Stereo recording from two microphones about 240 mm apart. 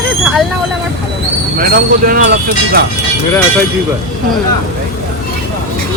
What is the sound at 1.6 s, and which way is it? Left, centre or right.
Speech, right.